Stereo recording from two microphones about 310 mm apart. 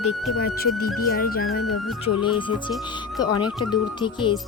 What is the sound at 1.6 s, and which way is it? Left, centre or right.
Music, left.